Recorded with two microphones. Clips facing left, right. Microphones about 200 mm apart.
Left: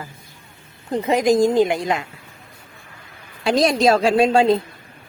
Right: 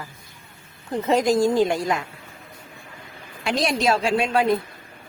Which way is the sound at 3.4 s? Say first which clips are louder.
Left 6 dB; 35° left (ahead or behind).